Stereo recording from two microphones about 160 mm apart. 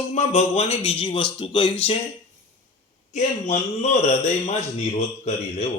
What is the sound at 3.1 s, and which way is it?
A man's voice, 45° left (ahead or behind).